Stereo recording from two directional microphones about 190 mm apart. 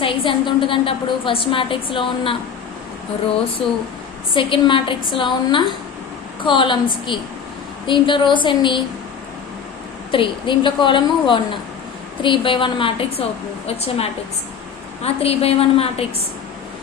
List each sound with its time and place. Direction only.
0.0 s a woman's voice: 25° left (ahead or behind)
4.4 s a woman's voice: 25° left (ahead or behind)
10.1 s a woman's voice: 25° left (ahead or behind)